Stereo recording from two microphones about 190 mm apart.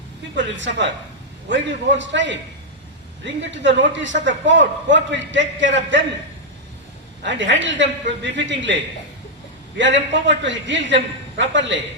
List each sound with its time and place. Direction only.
0.3 s a man's voice: 75° right (ahead or behind)
7.2 s a man's voice: 75° right (ahead or behind)